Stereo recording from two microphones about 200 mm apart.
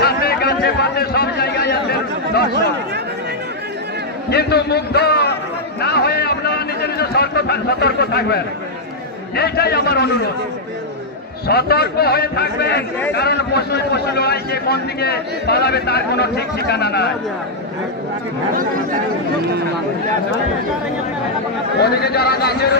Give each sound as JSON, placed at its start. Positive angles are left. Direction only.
{"t": 0.0, "sound": "a sound", "side_deg": 50}
{"t": 4.3, "sound": "a man's voice", "side_deg": 55}
{"t": 5.8, "sound": "a sound", "side_deg": 55}
{"t": 9.3, "sound": "a man's voice", "side_deg": 50}
{"t": 11.4, "sound": "a man's voice", "side_deg": 50}
{"t": 21.8, "sound": "a man's voice", "side_deg": 55}